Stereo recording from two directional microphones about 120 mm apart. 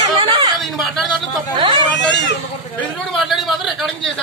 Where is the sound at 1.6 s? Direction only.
45° right (ahead or behind).